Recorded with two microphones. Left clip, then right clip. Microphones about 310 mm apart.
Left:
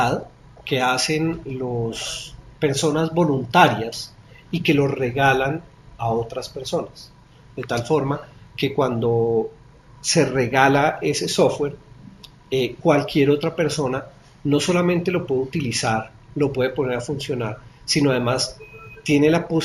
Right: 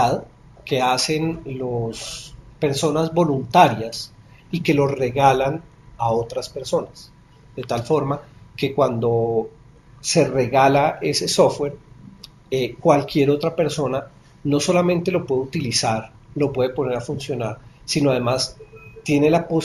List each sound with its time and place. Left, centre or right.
0.6 s speech: centre